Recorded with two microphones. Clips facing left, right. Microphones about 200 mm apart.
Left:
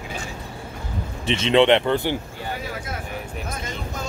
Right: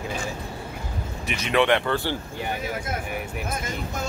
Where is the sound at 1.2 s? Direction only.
25° left (ahead or behind).